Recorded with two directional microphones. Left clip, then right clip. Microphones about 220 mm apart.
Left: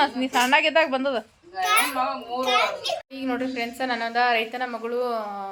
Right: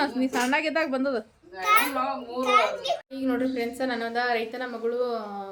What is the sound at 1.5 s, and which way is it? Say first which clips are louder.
A child's voice: left 1 dB; 35° right (ahead or behind).